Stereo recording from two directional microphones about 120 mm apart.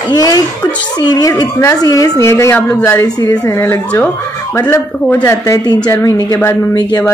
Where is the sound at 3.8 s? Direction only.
10° left (ahead or behind).